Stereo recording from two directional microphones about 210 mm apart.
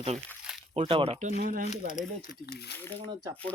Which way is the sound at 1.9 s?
40° left (ahead or behind).